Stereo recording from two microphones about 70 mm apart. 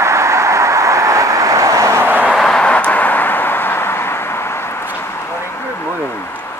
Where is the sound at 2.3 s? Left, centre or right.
Centre; by 4.2 s left.